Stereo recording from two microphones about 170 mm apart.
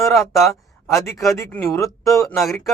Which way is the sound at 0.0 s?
Centre (ahead or behind).